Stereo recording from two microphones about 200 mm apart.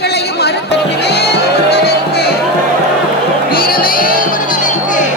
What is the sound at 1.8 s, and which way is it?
Music, 55° left (ahead or behind).